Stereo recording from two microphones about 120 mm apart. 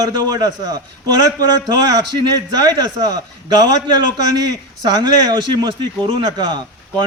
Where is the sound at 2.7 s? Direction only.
35° right (ahead or behind).